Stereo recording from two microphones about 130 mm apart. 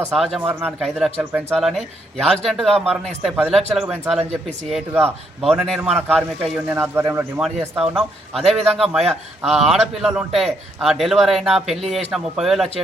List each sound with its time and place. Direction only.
0.1 s a man's voice: centre (ahead or behind)
6.7 s a man's voice: 15° right (ahead or behind)
7.4 s a man's voice: 5° right (ahead or behind)